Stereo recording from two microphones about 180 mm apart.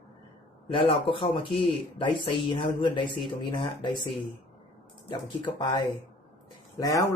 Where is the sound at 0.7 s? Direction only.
30° left (ahead or behind).